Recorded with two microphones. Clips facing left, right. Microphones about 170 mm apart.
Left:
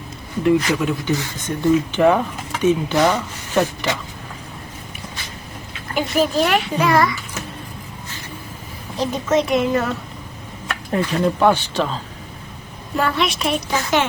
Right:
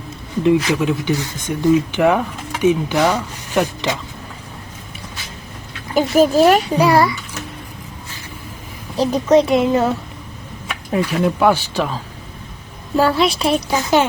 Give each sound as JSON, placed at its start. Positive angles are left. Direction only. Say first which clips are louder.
{"t": 0.4, "sound": "speech", "louder": "right 2 dB", "side_deg": -15}
{"t": 5.9, "sound": "a child's voice", "louder": "right 6 dB", "side_deg": -40}
{"t": 9.0, "sound": "a child's voice", "louder": "right 6 dB", "side_deg": -35}
{"t": 10.7, "sound": "speech", "louder": "right 1 dB", "side_deg": -10}
{"t": 13.0, "sound": "a child's voice", "louder": "right 5 dB", "side_deg": -30}